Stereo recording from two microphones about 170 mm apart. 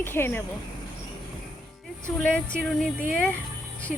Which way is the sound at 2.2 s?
5° left (ahead or behind).